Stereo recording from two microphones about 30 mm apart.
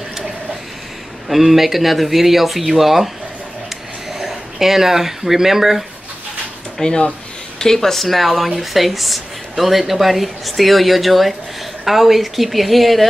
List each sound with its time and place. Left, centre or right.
1.3 s speech: centre
4.2 s speech: centre
6.8 s speech: left; by 13.1 s centre